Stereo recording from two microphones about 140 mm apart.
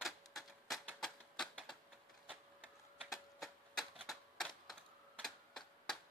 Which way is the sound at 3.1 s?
Centre (ahead or behind).